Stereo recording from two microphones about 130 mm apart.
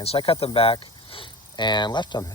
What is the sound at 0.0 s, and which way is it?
Speech, 50° left (ahead or behind).